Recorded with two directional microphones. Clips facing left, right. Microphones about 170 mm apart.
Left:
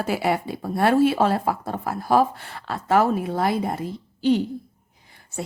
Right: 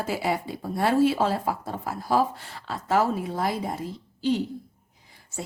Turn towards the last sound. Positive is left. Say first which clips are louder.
# left 5 dB
turn(degrees=60)  # may be behind; listen again after turning